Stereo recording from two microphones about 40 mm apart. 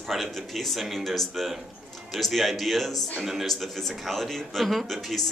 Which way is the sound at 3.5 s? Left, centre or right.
Centre.